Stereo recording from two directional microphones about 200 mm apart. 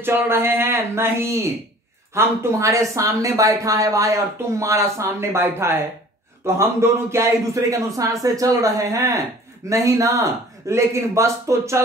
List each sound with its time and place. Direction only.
0.0 s speech: 10° right (ahead or behind)